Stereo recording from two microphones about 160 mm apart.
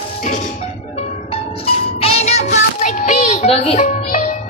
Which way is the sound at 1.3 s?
35° left (ahead or behind).